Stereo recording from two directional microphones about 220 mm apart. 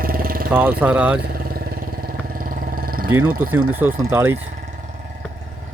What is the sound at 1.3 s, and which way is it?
Vehicle, 40° right (ahead or behind).